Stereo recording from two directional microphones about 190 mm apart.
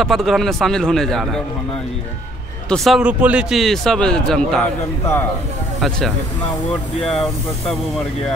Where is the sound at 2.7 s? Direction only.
Centre (ahead or behind).